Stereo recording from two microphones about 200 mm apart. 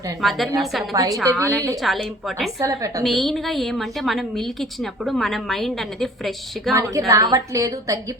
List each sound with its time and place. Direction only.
0.2 s a woman's voice: centre (ahead or behind)
0.9 s speech: 15° right (ahead or behind)
1.8 s a woman's voice: centre (ahead or behind)
2.6 s speech: 15° right (ahead or behind)
3.0 s a woman's voice: centre (ahead or behind)
7.1 s speech: 15° right (ahead or behind)